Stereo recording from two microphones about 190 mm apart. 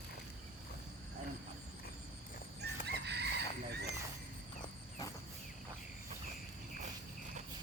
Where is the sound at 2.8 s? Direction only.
60° right (ahead or behind).